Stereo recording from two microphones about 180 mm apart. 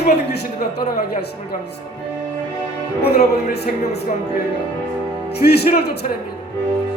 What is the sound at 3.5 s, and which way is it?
Speech, 65° left (ahead or behind).